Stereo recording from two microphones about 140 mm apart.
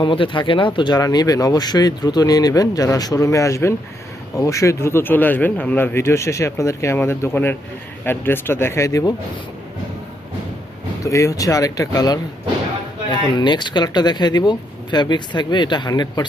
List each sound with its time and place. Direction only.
0.0 s speech: 35° left (ahead or behind)
11.0 s speech: 20° left (ahead or behind)